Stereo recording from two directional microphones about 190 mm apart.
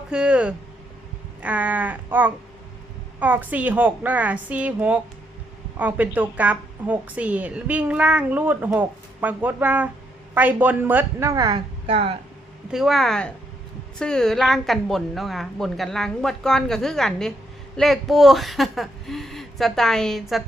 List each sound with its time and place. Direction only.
0.1 s a woman's voice: 5° right (ahead or behind)
11.9 s speech: 30° right (ahead or behind)
12.7 s a woman's voice: centre (ahead or behind)